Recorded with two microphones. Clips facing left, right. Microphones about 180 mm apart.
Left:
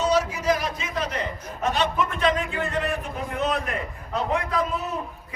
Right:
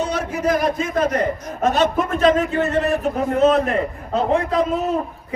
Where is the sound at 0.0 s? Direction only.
55° right (ahead or behind); by 3.8 s 35° right (ahead or behind).